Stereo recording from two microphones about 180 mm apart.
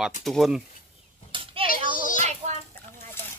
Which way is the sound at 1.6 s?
50° left (ahead or behind).